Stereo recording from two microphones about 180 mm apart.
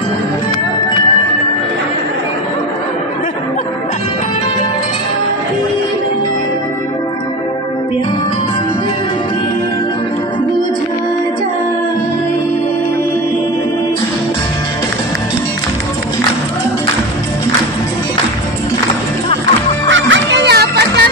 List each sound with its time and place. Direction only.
19.9 s music: 90° right; by 21.1 s 65° right (ahead or behind)